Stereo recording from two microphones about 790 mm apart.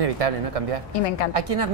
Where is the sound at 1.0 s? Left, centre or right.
Left.